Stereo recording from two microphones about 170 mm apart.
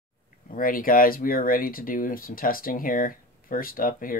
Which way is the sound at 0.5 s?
55° left (ahead or behind).